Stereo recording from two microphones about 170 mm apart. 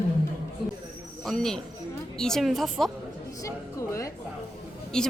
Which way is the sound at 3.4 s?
20° left (ahead or behind).